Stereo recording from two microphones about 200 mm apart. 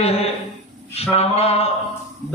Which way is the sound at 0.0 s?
30° left (ahead or behind).